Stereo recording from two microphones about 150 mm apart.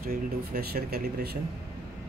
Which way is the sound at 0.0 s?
85° right.